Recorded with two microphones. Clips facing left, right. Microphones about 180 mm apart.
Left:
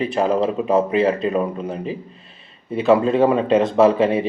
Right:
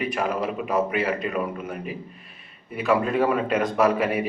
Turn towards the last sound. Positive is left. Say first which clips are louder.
# left 6 dB
turn(degrees=25)  # may be behind; listen again after turning